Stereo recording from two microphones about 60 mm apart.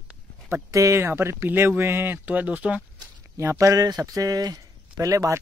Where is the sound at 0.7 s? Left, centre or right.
Right.